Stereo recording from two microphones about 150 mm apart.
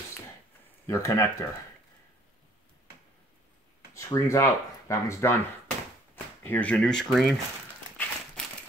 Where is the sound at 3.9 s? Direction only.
20° left (ahead or behind); by 7.3 s centre (ahead or behind).